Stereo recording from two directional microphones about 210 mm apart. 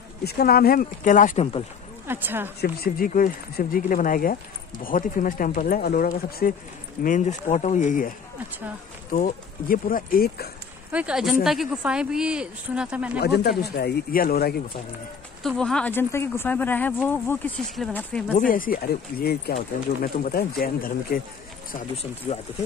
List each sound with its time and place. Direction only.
0.2 s speech: 50° left (ahead or behind); by 1.6 s 30° left (ahead or behind)
2.0 s speech: 10° right (ahead or behind)
2.6 s speech: 45° left (ahead or behind)
9.1 s speech: 40° left (ahead or behind)
10.9 s speech: 5° right (ahead or behind)
13.2 s speech: 50° left (ahead or behind)
15.4 s speech: 5° left (ahead or behind)
18.4 s speech: 40° left (ahead or behind)
22.3 s speech: 30° left (ahead or behind)